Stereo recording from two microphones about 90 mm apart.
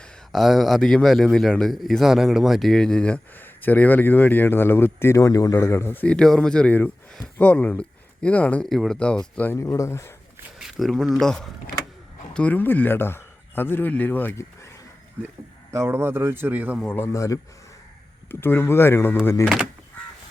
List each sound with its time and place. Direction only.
0.3 s a man's voice: centre (ahead or behind); by 8.6 s 15° left (ahead or behind)
8.7 s a man's voice: 5° left (ahead or behind)
9.6 s speech: 35° left (ahead or behind)
10.6 s speech: centre (ahead or behind)
12.3 s speech: 15° left (ahead or behind)
15.7 s a man's voice: 30° right (ahead or behind)
17.1 s speech: 35° left (ahead or behind)
18.3 s speech: 25° left (ahead or behind)